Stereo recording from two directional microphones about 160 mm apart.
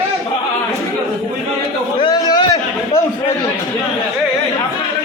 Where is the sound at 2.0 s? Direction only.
25° left (ahead or behind).